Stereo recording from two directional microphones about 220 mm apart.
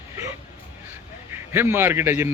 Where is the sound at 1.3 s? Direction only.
10° right (ahead or behind).